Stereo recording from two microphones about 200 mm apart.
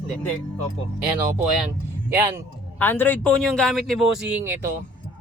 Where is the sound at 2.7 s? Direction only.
10° left (ahead or behind).